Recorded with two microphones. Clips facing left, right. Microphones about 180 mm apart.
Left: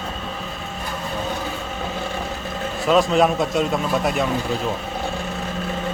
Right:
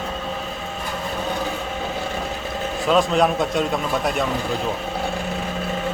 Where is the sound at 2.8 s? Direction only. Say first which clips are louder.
Left 1 dB; centre (ahead or behind).